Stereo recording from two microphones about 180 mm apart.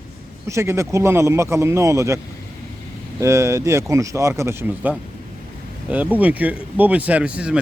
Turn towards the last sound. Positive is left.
turn(degrees=-5)  # may be behind; listen again after turning